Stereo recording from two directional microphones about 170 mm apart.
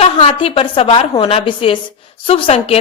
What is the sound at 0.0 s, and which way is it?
A woman's voice, 35° left (ahead or behind).